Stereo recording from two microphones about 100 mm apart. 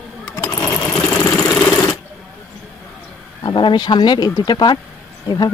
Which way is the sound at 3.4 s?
55° left (ahead or behind).